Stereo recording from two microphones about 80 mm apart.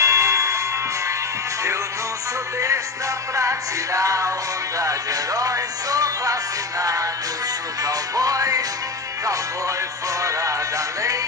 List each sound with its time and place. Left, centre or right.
0.0 s music: right
3.3 s music: right